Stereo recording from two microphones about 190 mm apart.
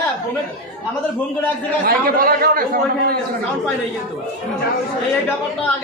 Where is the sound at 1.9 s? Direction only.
50° right (ahead or behind).